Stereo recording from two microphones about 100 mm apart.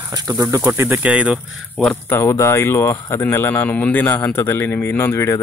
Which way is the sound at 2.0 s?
25° left (ahead or behind).